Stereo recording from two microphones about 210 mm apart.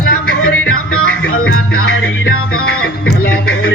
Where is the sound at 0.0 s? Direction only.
45° left (ahead or behind).